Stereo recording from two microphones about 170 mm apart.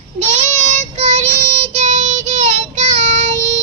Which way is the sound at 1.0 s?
40° right (ahead or behind).